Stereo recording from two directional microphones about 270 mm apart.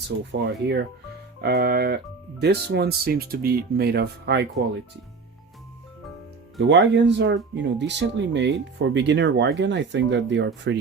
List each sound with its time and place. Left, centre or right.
0.3 s speech: right
6.6 s speech: right